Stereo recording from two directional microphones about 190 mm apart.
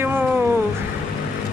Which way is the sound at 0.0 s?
10° right (ahead or behind).